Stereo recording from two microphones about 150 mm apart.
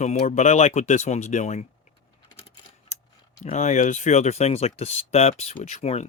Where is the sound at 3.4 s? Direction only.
50° left (ahead or behind).